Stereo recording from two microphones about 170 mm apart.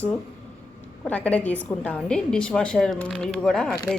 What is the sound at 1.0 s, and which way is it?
A woman's voice, 10° left (ahead or behind).